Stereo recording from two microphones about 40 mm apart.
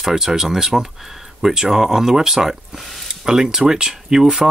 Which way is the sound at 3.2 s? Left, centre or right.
Centre.